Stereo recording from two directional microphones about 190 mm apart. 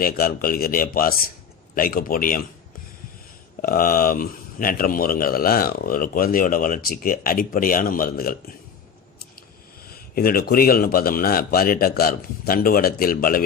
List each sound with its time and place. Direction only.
0.0 s speech: 50° left (ahead or behind)
3.6 s speech: 50° left (ahead or behind)
9.8 s speech: 50° left (ahead or behind)